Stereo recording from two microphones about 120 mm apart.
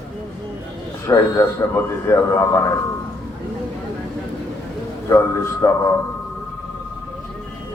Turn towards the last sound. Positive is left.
turn(degrees=25)  # may be behind; listen again after turning